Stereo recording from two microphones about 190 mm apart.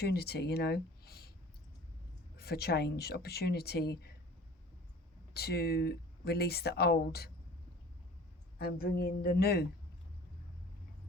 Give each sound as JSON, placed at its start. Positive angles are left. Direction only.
{"t": 0.0, "sound": "speech", "side_deg": 55}
{"t": 2.4, "sound": "speech", "side_deg": 55}
{"t": 5.3, "sound": "speech", "side_deg": 55}
{"t": 8.5, "sound": "speech", "side_deg": 55}